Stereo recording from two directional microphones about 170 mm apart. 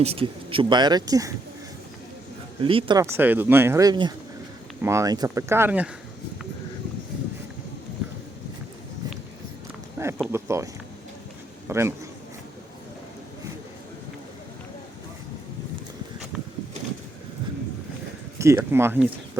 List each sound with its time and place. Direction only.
0.0 s speech: 35° right (ahead or behind)
2.6 s speech: 30° right (ahead or behind)
3.0 s speech: 15° right (ahead or behind)
10.0 s speech: 15° right (ahead or behind)
11.7 s speech: 15° right (ahead or behind)
18.3 s speech: 15° right (ahead or behind)